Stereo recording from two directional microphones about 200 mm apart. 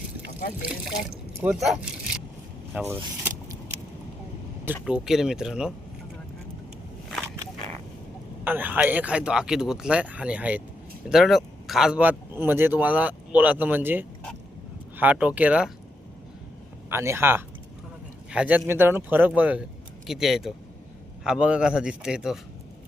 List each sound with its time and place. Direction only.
1.4 s speech: 5° right (ahead or behind)
2.7 s vehicle: 10° right (ahead or behind)
4.6 s speech: 5° right (ahead or behind)
8.4 s speech: 10° right (ahead or behind)
16.9 s speech: 15° right (ahead or behind)